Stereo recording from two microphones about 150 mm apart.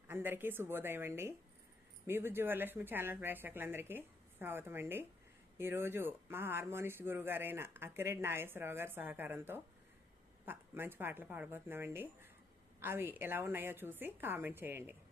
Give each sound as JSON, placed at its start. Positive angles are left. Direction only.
{"t": 0.1, "sound": "speech", "side_deg": -15}